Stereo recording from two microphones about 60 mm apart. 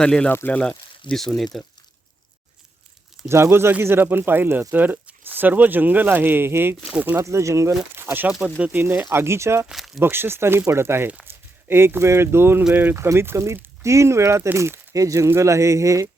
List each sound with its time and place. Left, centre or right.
0.0 s speech: centre
3.2 s speech: right
7.2 s speech: right
7.9 s speech: right
9.7 s a sound: centre
10.0 s speech: right
12.7 s speech: right
13.1 s speech: right
14.9 s speech: right